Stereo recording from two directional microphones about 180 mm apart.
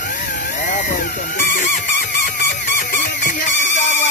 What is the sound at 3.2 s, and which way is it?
Music, 45° left (ahead or behind).